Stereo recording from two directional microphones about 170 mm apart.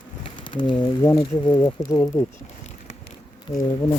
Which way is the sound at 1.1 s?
30° left (ahead or behind).